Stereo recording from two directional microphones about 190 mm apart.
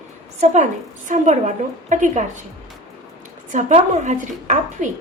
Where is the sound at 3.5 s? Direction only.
40° right (ahead or behind).